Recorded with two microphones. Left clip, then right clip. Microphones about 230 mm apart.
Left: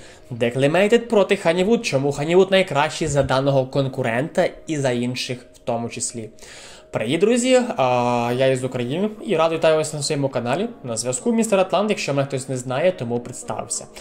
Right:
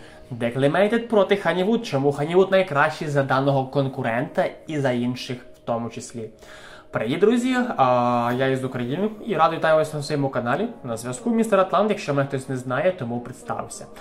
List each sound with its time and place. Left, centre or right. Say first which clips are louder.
0.4 s speech: left 2 dB; left